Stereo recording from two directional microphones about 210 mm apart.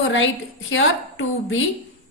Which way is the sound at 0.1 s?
65° left (ahead or behind).